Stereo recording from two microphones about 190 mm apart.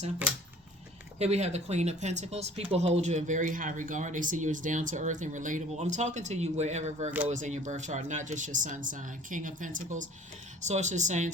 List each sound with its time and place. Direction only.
1.2 s speech: 35° right (ahead or behind)